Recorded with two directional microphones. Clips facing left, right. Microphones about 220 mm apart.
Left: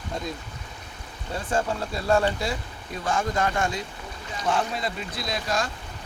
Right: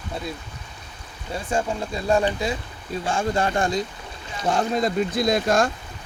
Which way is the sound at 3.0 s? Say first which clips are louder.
Right 2 dB; 30° right (ahead or behind).